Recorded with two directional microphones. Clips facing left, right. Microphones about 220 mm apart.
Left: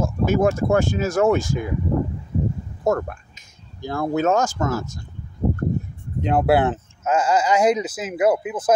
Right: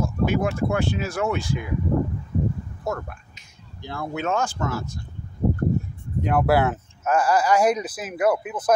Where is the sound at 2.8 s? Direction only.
45° left (ahead or behind).